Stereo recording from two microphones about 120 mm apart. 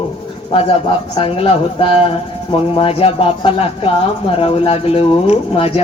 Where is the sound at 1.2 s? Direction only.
55° left (ahead or behind).